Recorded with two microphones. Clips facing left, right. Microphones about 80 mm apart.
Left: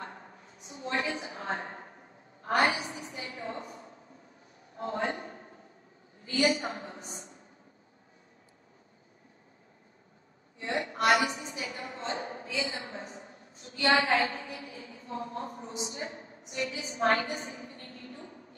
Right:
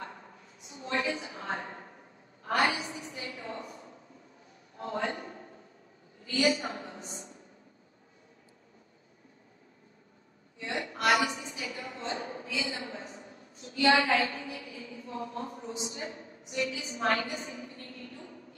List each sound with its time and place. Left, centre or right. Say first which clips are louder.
1.0 s a woman's voice: even; left
4.7 s a woman's voice: left 1 dB; left
10.6 s a woman's voice: left 2 dB; left